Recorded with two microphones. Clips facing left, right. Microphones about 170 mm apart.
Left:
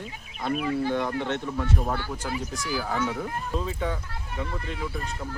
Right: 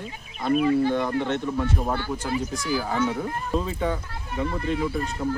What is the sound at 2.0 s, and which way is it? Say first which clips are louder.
Speech: right 4 dB; 10° left (ahead or behind).